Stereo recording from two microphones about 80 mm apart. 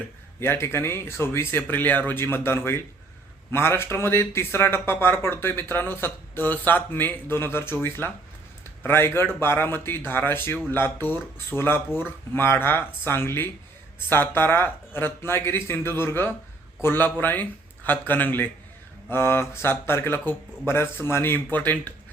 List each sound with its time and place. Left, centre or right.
0.3 s speech: left